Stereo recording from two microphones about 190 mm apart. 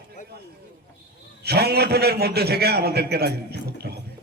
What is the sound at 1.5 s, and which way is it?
A man's voice, 55° right (ahead or behind).